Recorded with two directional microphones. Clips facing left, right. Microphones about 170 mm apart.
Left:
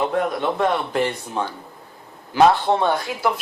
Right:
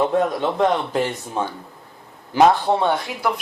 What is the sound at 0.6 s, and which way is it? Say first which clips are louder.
Speech: right 2 dB; 15° right (ahead or behind).